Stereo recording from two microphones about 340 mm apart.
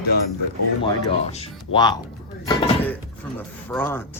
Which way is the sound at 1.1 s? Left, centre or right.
Centre.